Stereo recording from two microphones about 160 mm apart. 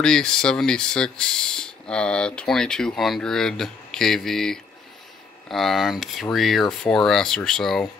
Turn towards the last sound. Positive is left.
turn(degrees=0)  # may be behind; listen again after turning